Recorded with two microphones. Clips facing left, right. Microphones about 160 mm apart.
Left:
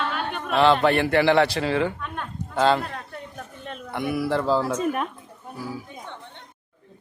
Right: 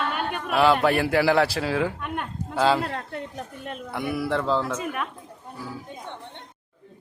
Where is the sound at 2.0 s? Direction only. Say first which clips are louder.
Right 3 dB; 15° right (ahead or behind).